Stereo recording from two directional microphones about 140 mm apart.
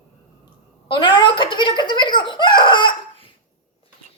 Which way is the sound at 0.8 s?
35° left (ahead or behind).